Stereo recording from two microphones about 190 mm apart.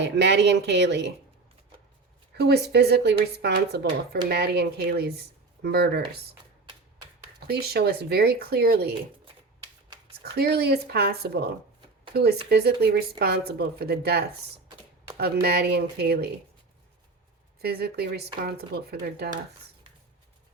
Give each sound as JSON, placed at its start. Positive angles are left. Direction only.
{"t": 0.0, "sound": "speech", "side_deg": -65}
{"t": 2.4, "sound": "speech", "side_deg": -60}
{"t": 7.3, "sound": "speech", "side_deg": -55}
{"t": 10.3, "sound": "speech", "side_deg": -60}
{"t": 17.6, "sound": "speech", "side_deg": -55}